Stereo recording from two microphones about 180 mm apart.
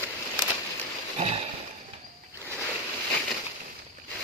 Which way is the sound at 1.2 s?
35° right (ahead or behind).